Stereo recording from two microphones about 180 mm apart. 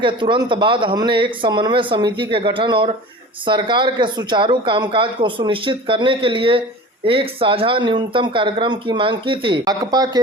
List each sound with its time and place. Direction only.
0.0 s speech: 25° right (ahead or behind)